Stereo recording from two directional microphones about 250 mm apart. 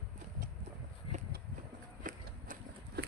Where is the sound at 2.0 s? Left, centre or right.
Right.